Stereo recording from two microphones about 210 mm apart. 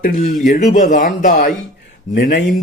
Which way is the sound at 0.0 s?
40° left (ahead or behind).